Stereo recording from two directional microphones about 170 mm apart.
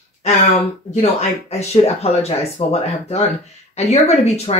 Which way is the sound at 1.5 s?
40° left (ahead or behind).